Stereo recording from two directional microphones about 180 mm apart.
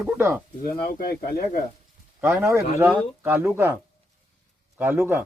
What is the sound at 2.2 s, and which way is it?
Speech, 15° right (ahead or behind).